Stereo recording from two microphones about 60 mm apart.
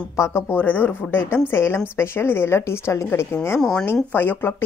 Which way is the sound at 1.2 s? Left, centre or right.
Left.